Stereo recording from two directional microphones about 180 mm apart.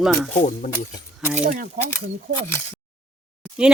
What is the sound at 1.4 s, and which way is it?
Speech, 50° right (ahead or behind).